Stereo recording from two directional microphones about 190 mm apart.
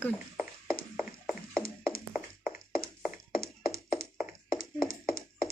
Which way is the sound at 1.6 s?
50° left (ahead or behind).